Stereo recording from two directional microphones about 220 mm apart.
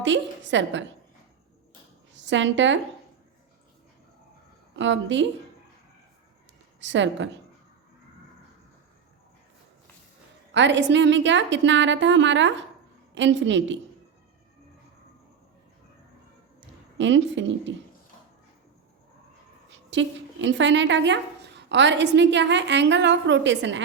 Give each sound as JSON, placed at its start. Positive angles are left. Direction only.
{"t": 0.0, "sound": "a woman's voice", "side_deg": -55}
{"t": 2.1, "sound": "a woman's voice", "side_deg": -55}
{"t": 4.8, "sound": "a woman's voice", "side_deg": -55}
{"t": 6.7, "sound": "a woman's voice", "side_deg": -55}
{"t": 10.5, "sound": "a woman's voice", "side_deg": -55}
{"t": 16.6, "sound": "speech", "side_deg": -55}
{"t": 19.9, "sound": "a woman's voice", "side_deg": -55}